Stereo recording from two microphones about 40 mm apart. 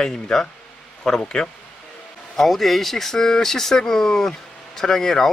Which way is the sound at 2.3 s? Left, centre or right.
Centre.